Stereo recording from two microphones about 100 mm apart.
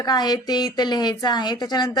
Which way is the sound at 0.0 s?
45° left (ahead or behind).